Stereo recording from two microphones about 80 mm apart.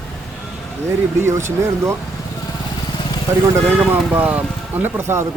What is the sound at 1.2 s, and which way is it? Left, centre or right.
Speech, right.